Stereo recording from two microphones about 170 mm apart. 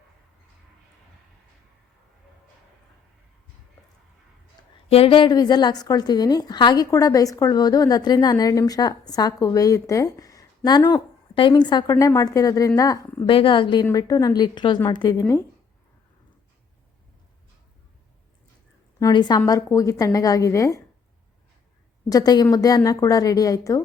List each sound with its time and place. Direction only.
4.9 s a woman's voice: 35° left (ahead or behind); by 15.4 s 20° left (ahead or behind)
18.9 s a woman's voice: 20° left (ahead or behind)
22.1 s a woman's voice: 25° left (ahead or behind)